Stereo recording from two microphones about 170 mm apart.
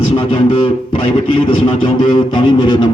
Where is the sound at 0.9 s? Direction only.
30° left (ahead or behind).